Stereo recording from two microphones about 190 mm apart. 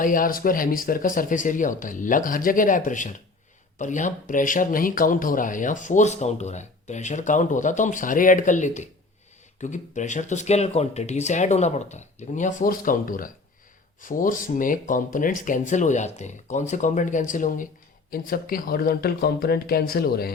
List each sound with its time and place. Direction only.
0.0 s speech: 45° left (ahead or behind)